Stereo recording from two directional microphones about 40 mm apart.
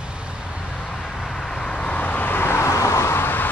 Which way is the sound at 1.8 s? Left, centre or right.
Left.